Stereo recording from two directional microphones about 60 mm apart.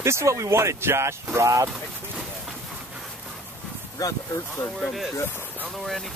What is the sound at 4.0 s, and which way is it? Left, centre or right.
Speech, left.